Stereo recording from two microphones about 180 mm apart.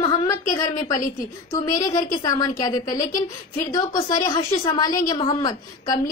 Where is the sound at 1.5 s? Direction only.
20° left (ahead or behind).